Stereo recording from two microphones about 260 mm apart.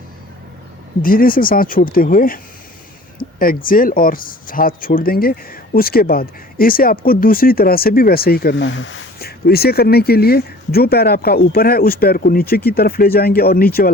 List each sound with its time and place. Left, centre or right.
1.0 s speech: left